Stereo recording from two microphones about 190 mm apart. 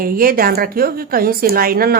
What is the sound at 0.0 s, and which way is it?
A woman's voice, 50° right (ahead or behind).